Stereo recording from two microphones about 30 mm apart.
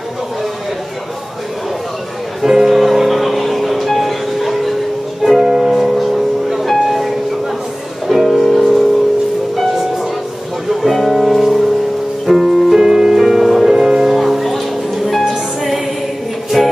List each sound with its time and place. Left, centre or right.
2.4 s music: centre
8.3 s music: centre
10.7 s music: centre
12.8 s music: right
13.2 s music: centre
13.7 s music: centre
14.1 s music: centre
16.5 s music: centre